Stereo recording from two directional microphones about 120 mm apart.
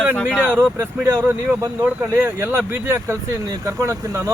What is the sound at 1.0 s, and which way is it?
Speech, 20° right (ahead or behind).